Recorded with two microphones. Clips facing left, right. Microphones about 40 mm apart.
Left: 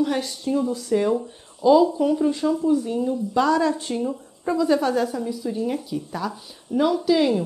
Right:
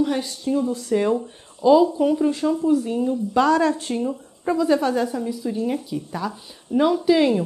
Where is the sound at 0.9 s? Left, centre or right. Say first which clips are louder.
Even; centre.